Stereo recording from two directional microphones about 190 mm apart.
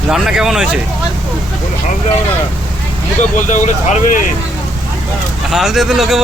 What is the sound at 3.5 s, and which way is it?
Speech, 40° left (ahead or behind).